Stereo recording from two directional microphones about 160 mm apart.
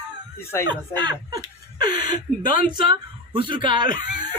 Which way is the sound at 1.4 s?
25° right (ahead or behind).